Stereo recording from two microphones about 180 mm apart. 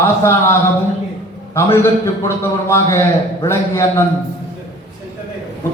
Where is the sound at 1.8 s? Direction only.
15° left (ahead or behind).